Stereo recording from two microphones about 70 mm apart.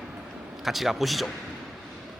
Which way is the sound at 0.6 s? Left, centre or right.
Centre.